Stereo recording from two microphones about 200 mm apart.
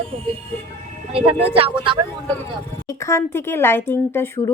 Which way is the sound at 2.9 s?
15° left (ahead or behind).